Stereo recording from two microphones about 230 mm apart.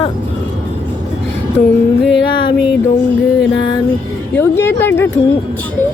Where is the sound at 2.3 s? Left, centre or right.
Centre.